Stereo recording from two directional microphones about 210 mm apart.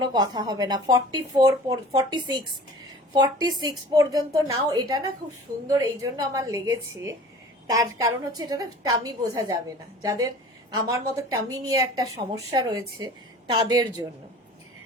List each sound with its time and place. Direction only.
0.0 s a woman's voice: 20° right (ahead or behind)